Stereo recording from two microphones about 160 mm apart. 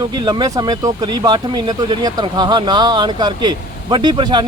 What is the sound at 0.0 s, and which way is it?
Speech, 25° right (ahead or behind).